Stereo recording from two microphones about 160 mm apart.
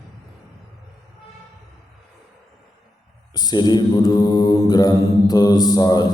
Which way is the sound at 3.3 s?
25° left (ahead or behind).